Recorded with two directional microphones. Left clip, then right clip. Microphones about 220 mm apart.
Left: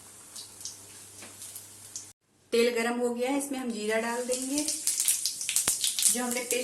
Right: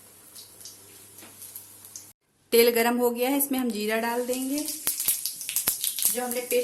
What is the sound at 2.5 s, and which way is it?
A woman's voice, 40° right (ahead or behind).